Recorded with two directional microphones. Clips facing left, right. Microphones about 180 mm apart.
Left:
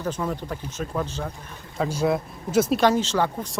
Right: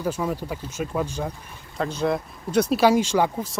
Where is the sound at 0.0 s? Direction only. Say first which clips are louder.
Right 2 dB; 10° right (ahead or behind).